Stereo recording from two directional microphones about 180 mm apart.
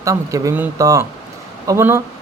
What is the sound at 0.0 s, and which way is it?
Speech, 20° right (ahead or behind).